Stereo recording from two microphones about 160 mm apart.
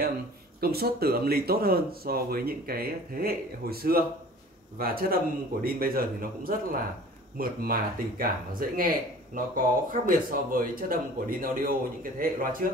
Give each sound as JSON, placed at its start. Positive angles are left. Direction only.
{"t": 0.6, "sound": "speech", "side_deg": -70}